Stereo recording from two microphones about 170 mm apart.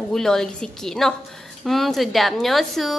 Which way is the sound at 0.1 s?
5° left (ahead or behind).